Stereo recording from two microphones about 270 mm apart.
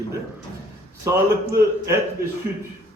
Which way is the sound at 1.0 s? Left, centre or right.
Centre.